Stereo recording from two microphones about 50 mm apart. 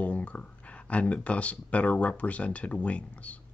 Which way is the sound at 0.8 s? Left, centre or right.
Left.